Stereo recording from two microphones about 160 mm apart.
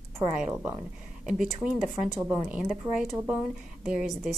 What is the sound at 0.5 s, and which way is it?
Speech, 15° right (ahead or behind).